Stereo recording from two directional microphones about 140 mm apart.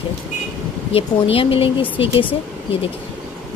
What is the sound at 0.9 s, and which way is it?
Speech, 40° left (ahead or behind).